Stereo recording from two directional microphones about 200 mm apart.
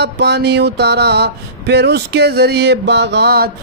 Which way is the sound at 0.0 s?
55° right (ahead or behind).